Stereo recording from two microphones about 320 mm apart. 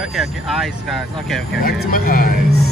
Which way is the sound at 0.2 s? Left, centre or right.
Centre.